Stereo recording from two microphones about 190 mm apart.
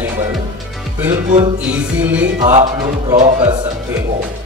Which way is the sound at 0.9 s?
10° right (ahead or behind).